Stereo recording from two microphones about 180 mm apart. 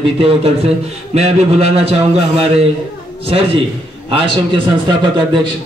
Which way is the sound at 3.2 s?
30° right (ahead or behind).